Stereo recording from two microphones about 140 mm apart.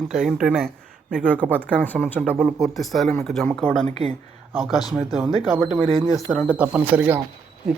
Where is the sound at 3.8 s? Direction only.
45° right (ahead or behind).